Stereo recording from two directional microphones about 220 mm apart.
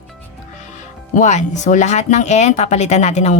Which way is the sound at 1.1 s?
35° left (ahead or behind).